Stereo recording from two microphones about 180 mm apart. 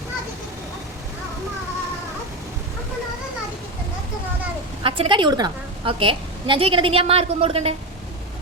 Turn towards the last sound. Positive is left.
turn(degrees=-35)  # may be behind; listen again after turning